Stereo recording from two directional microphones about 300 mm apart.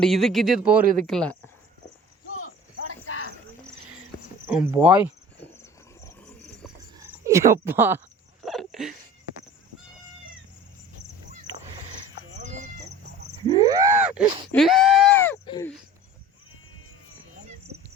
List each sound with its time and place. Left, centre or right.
0.0 s speech: centre
0.8 s speech: right
1.0 s speech: centre
4.4 s speech: centre
7.0 s speech: centre
8.4 s a sound: centre
13.5 s a sound: centre
14.5 s speech: centre